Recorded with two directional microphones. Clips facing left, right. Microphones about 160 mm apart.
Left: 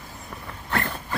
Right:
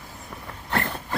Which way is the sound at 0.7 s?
30° right (ahead or behind).